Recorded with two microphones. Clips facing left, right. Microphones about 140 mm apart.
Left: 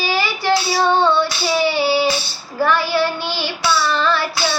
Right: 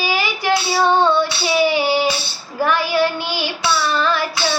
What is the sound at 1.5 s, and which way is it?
Child singing, 15° right (ahead or behind).